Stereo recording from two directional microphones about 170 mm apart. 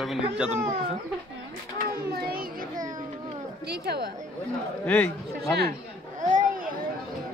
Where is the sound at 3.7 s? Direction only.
70° right (ahead or behind).